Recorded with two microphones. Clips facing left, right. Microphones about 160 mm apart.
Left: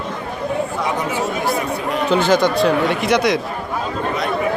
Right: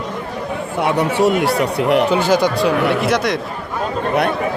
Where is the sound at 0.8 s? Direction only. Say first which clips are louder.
Right 5 dB; 70° right (ahead or behind).